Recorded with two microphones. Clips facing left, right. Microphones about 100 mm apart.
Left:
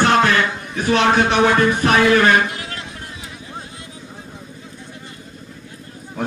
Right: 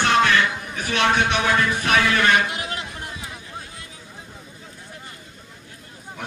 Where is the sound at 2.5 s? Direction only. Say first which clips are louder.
Right 1 dB; 20° right (ahead or behind).